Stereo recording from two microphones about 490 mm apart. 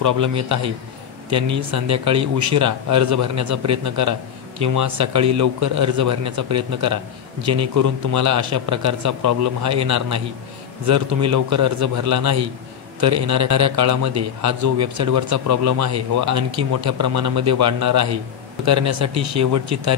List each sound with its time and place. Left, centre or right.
0.0 s a man's voice: right